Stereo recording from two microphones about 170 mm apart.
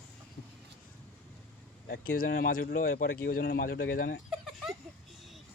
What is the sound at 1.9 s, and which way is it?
Speech, 60° left (ahead or behind).